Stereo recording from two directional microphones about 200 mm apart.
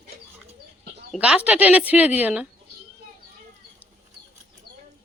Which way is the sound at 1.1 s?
5° right (ahead or behind).